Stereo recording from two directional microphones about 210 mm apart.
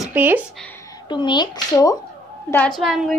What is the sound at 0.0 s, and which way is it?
Speech, 10° right (ahead or behind).